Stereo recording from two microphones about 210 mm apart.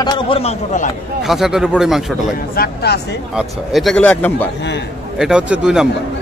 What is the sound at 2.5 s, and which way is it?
Speech, 50° left (ahead or behind).